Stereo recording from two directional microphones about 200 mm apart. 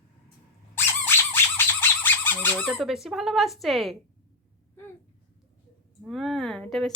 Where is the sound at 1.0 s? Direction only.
10° left (ahead or behind).